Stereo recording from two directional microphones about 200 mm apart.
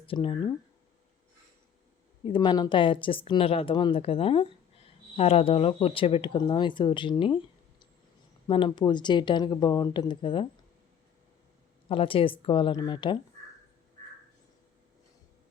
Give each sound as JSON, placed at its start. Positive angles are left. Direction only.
{"t": 0.1, "sound": "speech", "side_deg": 25}
{"t": 2.2, "sound": "speech", "side_deg": 25}
{"t": 11.9, "sound": "speech", "side_deg": 25}